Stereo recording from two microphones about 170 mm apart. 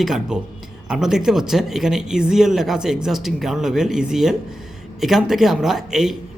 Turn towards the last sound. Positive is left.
turn(degrees=0)  # may be behind; listen again after turning